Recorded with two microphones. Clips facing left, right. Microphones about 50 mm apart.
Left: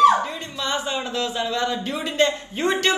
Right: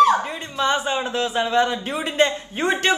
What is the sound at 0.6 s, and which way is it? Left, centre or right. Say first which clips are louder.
A man's voice: right 5 dB; right.